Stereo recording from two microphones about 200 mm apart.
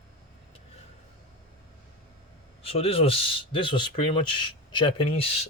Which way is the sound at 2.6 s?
30° left (ahead or behind).